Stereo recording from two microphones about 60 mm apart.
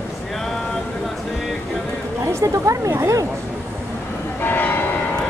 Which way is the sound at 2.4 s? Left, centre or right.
Right.